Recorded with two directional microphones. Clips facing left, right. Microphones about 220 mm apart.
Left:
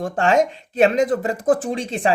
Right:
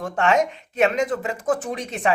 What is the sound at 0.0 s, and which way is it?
Speech, 30° left (ahead or behind).